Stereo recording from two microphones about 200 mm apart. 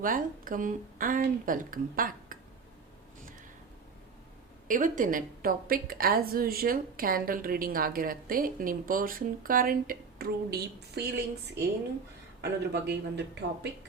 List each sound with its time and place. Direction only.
0.0 s a woman's voice: 45° right (ahead or behind)
4.7 s a woman's voice: 40° right (ahead or behind)
12.4 s speech: 55° right (ahead or behind)